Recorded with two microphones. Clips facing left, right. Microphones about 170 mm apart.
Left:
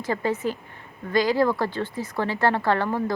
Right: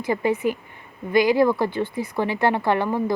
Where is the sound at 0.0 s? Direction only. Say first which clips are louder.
Right 3 dB; 15° right (ahead or behind).